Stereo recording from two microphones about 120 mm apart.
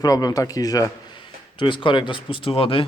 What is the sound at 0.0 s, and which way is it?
Speech, 30° left (ahead or behind).